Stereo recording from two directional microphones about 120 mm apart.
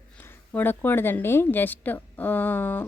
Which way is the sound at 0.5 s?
15° left (ahead or behind).